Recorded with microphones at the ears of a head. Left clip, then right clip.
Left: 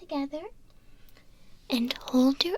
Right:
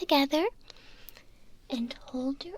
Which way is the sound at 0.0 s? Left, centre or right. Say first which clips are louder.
Right 9 dB; right.